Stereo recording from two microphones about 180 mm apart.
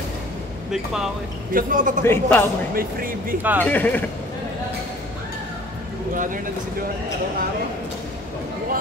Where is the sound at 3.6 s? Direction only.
10° left (ahead or behind).